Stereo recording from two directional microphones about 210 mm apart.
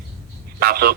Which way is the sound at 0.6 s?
45° right (ahead or behind).